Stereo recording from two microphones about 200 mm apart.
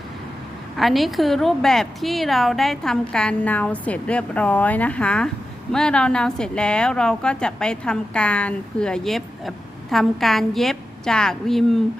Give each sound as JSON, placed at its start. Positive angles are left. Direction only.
{"t": 0.8, "sound": "a woman's voice", "side_deg": 0}